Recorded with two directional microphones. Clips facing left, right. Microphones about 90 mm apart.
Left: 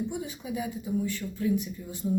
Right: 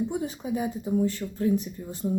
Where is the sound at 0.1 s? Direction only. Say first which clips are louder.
Right 5 dB; 40° right (ahead or behind).